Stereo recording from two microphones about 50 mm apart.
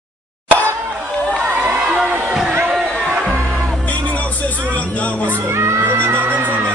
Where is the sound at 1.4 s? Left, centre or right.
Right.